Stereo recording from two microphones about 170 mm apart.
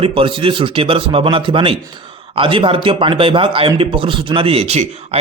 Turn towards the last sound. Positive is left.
turn(degrees=-40)  # may be behind; listen again after turning